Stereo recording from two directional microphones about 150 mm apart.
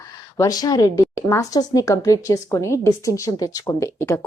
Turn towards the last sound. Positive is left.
turn(degrees=15)  # may be behind; listen again after turning